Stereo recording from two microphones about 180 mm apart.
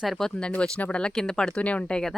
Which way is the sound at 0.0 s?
Centre (ahead or behind).